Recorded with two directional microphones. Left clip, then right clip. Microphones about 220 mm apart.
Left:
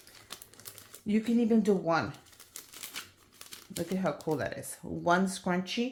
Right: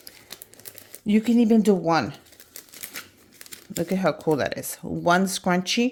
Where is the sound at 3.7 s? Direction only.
50° right (ahead or behind).